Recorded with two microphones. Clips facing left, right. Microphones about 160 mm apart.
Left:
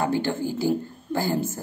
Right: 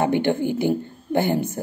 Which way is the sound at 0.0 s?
20° right (ahead or behind).